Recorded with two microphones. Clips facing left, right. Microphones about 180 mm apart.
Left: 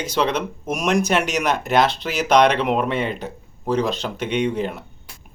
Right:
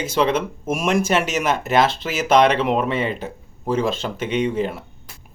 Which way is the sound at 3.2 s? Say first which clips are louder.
Even; 5° right (ahead or behind).